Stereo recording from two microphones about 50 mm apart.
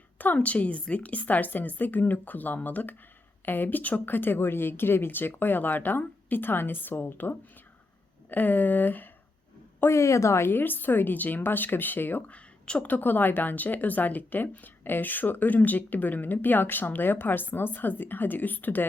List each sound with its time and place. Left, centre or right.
0.3 s speech: left
9.9 s speech: left
10.5 s speech: left
12.3 s speech: left
12.9 s speech: left